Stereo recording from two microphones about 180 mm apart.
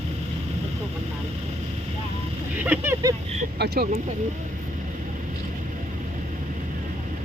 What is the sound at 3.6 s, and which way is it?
Speech, 65° right (ahead or behind).